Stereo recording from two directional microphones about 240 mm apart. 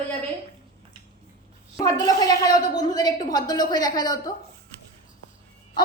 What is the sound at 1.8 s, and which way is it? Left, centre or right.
Speech, centre.